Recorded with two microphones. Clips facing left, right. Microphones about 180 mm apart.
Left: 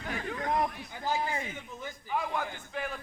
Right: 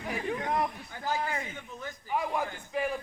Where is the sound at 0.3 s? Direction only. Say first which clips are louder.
Even; 20° right (ahead or behind).